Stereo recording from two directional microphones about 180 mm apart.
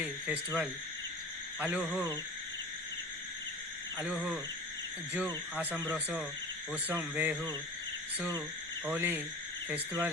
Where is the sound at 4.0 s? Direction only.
5° right (ahead or behind).